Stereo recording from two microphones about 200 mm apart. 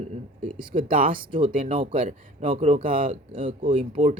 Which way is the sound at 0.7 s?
45° right (ahead or behind).